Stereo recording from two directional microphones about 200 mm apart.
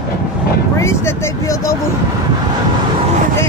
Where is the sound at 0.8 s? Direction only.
15° left (ahead or behind).